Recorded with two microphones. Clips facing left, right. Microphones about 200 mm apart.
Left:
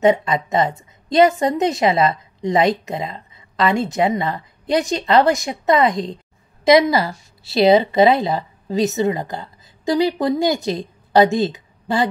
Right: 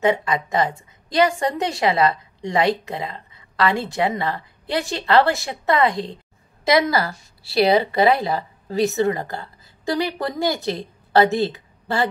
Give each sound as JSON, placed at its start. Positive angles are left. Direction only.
{"t": 0.0, "sound": "a woman's voice", "side_deg": 25}